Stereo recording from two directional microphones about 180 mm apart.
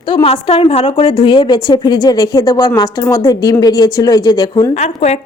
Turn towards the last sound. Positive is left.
turn(degrees=35)  # may be behind; listen again after turning